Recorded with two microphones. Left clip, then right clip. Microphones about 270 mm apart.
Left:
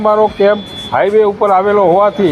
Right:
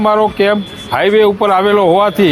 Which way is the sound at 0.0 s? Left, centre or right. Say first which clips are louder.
Left 1 dB; right.